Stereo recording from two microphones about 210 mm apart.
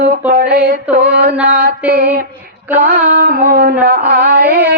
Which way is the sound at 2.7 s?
40° right (ahead or behind).